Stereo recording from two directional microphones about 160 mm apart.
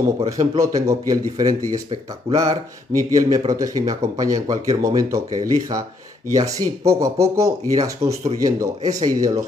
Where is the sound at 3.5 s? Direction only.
20° right (ahead or behind).